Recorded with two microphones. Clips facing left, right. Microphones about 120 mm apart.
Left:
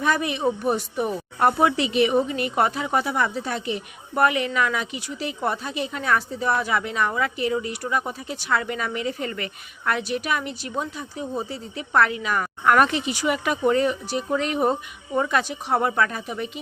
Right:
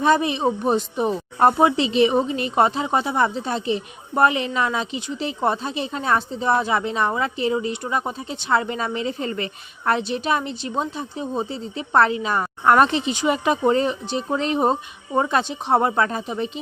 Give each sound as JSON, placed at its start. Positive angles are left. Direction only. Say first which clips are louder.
{"t": 0.0, "sound": "speech", "louder": "right 4 dB", "side_deg": -25}